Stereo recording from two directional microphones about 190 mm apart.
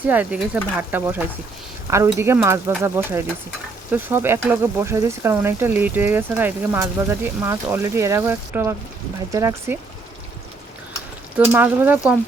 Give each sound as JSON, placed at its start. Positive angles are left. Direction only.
{"t": 0.1, "sound": "speech", "side_deg": -5}
{"t": 11.3, "sound": "speech", "side_deg": -10}